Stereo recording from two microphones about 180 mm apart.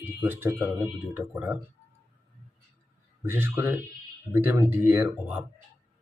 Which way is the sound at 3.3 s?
10° right (ahead or behind).